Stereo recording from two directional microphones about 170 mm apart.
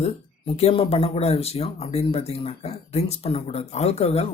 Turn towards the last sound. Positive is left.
turn(degrees=40)  # may be behind; listen again after turning